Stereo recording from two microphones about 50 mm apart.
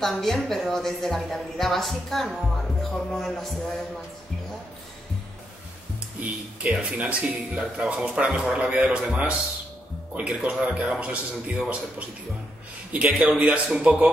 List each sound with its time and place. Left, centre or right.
0.0 s music: centre
0.4 s a woman's voice: centre
2.5 s music: centre
6.1 s a man's voice: right
12.9 s a man's voice: centre